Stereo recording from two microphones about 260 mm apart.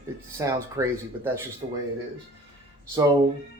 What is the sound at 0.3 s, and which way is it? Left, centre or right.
Speech, centre.